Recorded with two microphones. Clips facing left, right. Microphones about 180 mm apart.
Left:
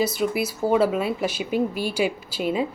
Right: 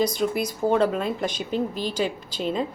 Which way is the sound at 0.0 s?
5° left (ahead or behind).